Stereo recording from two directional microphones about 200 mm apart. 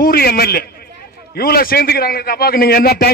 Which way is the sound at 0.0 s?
50° left (ahead or behind).